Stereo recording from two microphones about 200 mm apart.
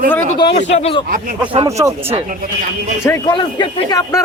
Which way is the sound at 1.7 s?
15° right (ahead or behind).